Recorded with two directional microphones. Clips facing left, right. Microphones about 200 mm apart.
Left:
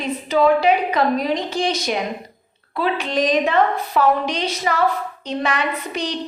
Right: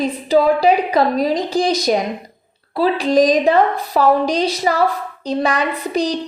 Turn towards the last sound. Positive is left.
turn(degrees=-35)  # may be behind; listen again after turning